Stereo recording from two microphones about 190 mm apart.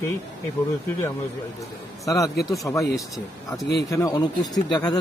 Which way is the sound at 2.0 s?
15° left (ahead or behind).